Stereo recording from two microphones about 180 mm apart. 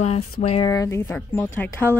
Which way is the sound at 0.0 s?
40° left (ahead or behind).